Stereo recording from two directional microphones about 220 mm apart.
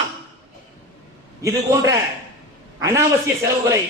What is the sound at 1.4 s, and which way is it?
Speech, 15° right (ahead or behind).